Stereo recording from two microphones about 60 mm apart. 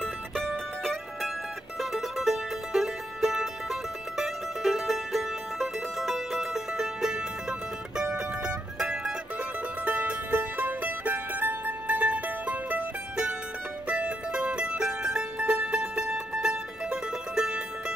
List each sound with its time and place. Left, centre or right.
0.0 s music: centre
4.2 s mandolin: centre
8.0 s music: centre
13.8 s mandolin: centre